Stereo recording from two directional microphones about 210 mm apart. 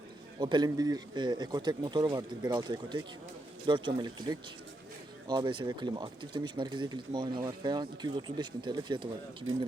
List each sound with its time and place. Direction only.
0.3 s speech: 20° right (ahead or behind)